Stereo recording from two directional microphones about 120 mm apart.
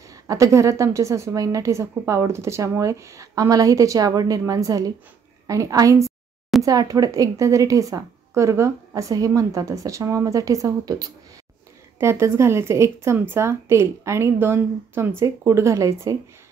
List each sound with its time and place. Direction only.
0.1 s a woman's voice: 25° right (ahead or behind)